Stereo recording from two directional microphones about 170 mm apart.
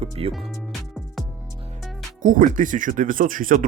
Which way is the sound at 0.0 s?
35° right (ahead or behind).